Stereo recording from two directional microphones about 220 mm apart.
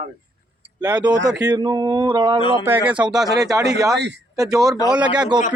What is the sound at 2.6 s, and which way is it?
Speech, 10° right (ahead or behind).